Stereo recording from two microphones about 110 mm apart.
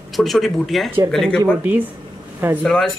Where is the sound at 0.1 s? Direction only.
Centre (ahead or behind).